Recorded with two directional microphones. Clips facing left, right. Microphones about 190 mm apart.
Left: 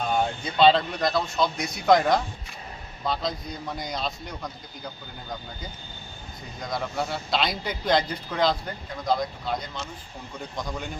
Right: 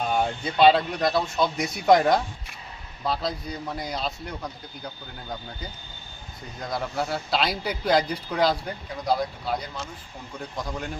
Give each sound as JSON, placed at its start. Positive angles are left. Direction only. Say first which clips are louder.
{"t": 0.2, "sound": "speech", "louder": "right 1 dB", "side_deg": -10}
{"t": 6.7, "sound": "speech", "louder": "right 1 dB", "side_deg": 0}